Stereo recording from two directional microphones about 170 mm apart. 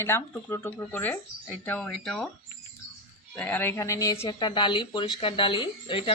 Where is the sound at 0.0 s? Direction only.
15° left (ahead or behind).